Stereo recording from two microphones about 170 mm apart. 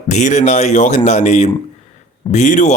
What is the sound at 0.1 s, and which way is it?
Speech, 45° left (ahead or behind).